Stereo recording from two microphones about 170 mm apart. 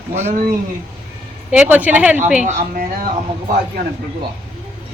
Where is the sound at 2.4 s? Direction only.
55° right (ahead or behind).